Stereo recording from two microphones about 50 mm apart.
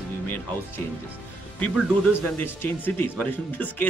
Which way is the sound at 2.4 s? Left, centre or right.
Left.